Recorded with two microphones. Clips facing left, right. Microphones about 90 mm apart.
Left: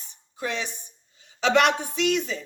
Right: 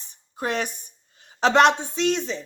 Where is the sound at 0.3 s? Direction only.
50° right (ahead or behind).